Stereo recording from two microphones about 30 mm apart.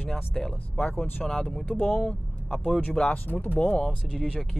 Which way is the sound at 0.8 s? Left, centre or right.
Left.